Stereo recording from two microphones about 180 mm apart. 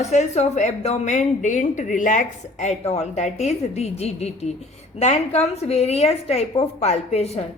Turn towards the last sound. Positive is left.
turn(degrees=35)  # may be behind; listen again after turning